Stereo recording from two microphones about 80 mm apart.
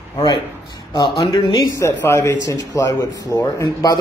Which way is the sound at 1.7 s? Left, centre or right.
Left.